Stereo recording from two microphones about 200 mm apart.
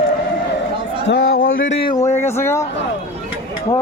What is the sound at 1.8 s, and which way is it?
Speech, 20° left (ahead or behind).